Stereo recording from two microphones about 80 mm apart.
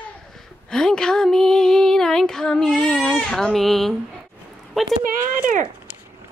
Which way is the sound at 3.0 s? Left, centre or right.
Centre.